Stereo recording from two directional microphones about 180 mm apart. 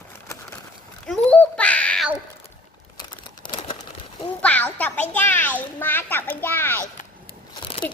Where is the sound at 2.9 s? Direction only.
25° left (ahead or behind).